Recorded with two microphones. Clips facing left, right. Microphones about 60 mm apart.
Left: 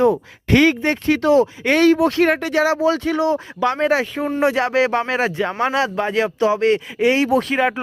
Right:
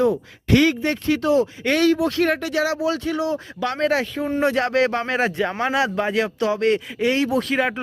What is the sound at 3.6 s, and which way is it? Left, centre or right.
Speech, centre.